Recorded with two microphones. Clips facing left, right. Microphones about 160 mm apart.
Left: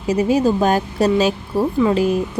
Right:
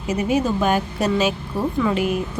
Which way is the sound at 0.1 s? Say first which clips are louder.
Left 4 dB; 35° left (ahead or behind).